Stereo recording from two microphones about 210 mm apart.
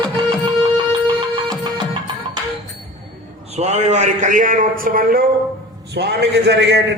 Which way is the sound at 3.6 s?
30° right (ahead or behind).